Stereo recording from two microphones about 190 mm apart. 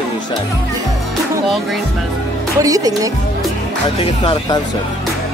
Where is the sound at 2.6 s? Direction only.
20° right (ahead or behind).